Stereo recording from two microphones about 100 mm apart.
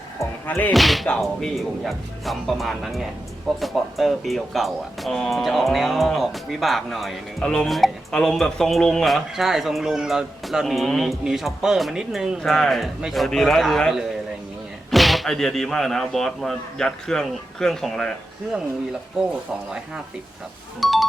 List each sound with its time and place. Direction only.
0.4 s speech: 20° left (ahead or behind)
0.7 s speech: centre (ahead or behind)
7.4 s speech: 10° left (ahead or behind); by 12.4 s 5° right (ahead or behind)
12.4 s speech: 5° left (ahead or behind)
20.8 s speech: centre (ahead or behind)